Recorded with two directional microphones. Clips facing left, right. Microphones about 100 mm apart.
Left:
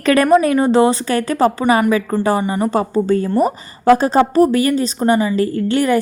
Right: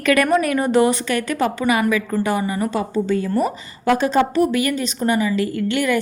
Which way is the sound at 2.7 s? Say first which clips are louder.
Left 5 dB; 45° left (ahead or behind).